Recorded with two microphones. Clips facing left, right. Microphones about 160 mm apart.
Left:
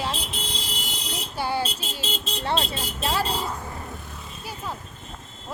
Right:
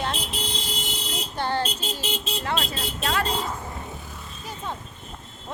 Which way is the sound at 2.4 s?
30° left (ahead or behind).